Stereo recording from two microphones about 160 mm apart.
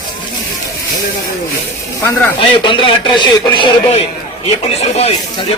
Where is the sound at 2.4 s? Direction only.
30° left (ahead or behind).